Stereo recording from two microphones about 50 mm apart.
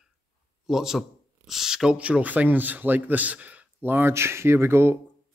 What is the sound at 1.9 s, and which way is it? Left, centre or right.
Speech, right.